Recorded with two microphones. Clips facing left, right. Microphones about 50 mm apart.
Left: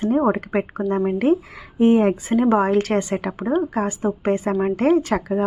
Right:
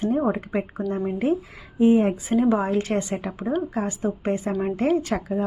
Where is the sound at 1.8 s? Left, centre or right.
Left.